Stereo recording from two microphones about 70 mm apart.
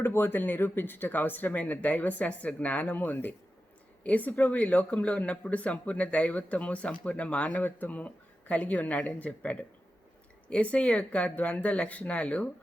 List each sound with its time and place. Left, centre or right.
0.0 s speech: left